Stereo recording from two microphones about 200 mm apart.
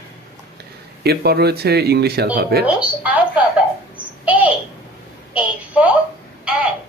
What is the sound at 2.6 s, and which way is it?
Speech, 5° right (ahead or behind).